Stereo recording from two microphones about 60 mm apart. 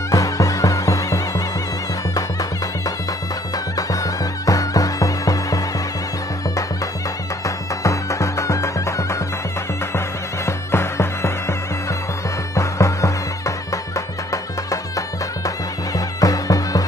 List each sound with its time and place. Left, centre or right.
0.1 s music: left
3.5 s music: left
7.4 s music: left
9.9 s music: left
12.5 s music: left